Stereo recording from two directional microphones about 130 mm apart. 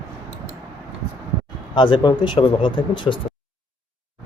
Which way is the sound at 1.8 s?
40° left (ahead or behind).